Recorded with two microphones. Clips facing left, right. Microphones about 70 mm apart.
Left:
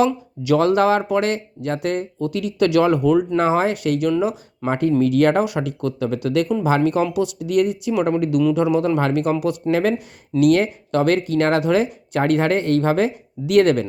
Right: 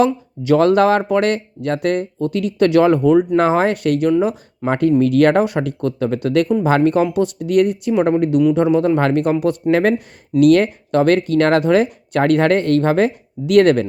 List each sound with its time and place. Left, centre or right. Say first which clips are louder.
0.0 s speech: right 2 dB; right
3.3 s speech: right 3 dB; right
8.2 s speech: right 3 dB; right